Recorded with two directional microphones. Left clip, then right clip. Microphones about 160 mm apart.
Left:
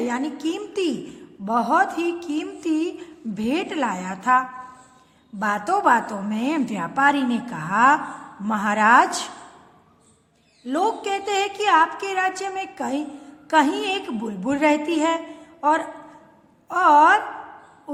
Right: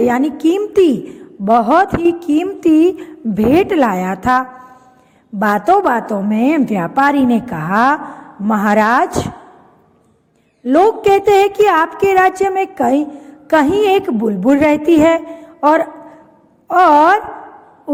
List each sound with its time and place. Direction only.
0.0 s a woman's voice: 50° right (ahead or behind)
1.5 s a woman's voice: 35° right (ahead or behind)
10.7 s a woman's voice: 40° right (ahead or behind)